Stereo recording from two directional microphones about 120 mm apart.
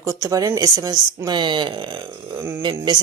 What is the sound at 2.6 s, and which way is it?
Speech, 40° right (ahead or behind).